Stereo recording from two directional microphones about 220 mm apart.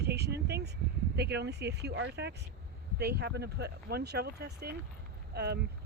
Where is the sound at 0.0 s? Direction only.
50° right (ahead or behind).